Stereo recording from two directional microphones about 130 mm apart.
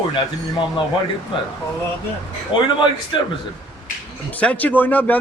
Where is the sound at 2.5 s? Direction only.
40° left (ahead or behind).